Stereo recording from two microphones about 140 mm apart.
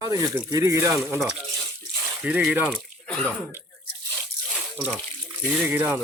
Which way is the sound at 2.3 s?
10° right (ahead or behind).